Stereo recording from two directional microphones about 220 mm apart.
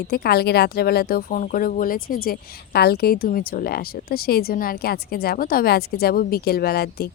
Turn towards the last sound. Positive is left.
turn(degrees=45)  # may be behind; listen again after turning